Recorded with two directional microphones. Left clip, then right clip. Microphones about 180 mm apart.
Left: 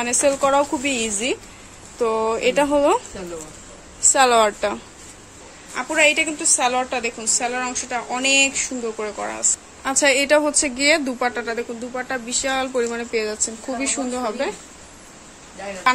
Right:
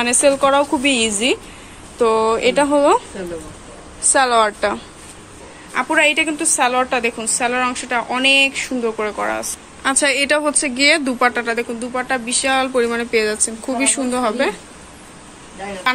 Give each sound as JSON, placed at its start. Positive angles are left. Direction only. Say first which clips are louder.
{"t": 0.0, "sound": "a woman's voice", "louder": "right 4 dB", "side_deg": 5}
{"t": 4.1, "sound": "a woman's voice", "louder": "right 1 dB", "side_deg": 15}
{"t": 5.8, "sound": "a woman's voice", "louder": "right 2 dB", "side_deg": 0}